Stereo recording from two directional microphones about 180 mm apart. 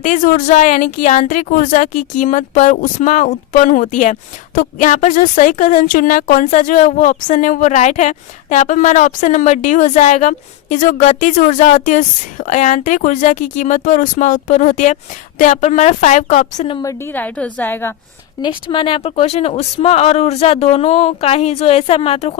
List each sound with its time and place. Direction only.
0.0 s speech: 45° left (ahead or behind)
16.8 s a woman's voice: 10° left (ahead or behind)
18.4 s speech: 25° left (ahead or behind)